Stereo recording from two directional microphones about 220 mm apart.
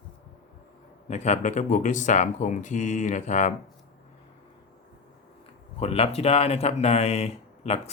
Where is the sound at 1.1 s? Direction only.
30° left (ahead or behind).